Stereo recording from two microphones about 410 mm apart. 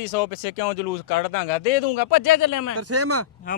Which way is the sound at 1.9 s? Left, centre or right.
Left.